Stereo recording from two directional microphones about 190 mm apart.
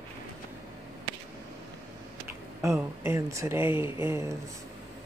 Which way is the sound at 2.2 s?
10° right (ahead or behind).